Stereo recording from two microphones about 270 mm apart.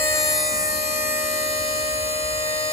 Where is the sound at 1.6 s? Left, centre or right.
Left.